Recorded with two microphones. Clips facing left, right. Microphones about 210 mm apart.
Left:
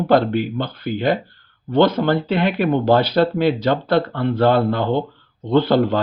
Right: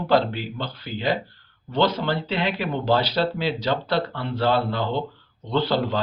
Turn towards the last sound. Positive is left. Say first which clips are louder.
# left 7 dB
turn(degrees=55)  # may be behind; listen again after turning